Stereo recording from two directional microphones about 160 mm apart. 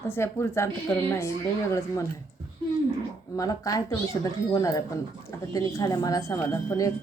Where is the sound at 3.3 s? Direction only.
20° left (ahead or behind).